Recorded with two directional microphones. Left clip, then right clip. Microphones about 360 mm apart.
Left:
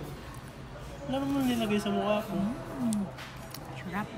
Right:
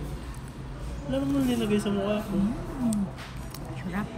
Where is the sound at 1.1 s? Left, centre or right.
Centre.